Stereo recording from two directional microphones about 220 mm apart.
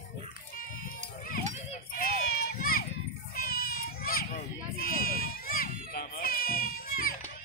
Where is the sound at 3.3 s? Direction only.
40° left (ahead or behind).